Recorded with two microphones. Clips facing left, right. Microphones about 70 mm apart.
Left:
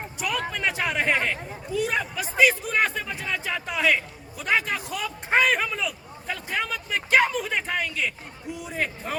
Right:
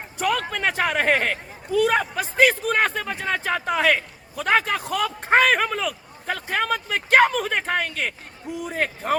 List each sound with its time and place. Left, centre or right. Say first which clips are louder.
0.2 s a man's voice: right 5 dB; right